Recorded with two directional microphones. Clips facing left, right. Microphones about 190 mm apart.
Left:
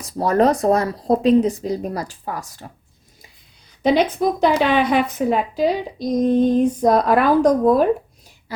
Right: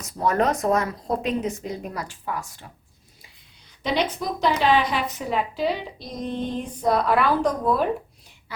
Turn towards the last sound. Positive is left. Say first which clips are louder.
# left 8 dB
turn(degrees=45)  # may be behind; listen again after turning